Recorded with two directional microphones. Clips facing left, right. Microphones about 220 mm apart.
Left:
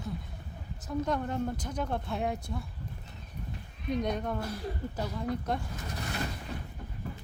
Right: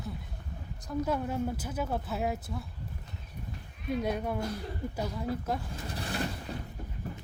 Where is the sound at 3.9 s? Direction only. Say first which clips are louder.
Even; 5° right (ahead or behind).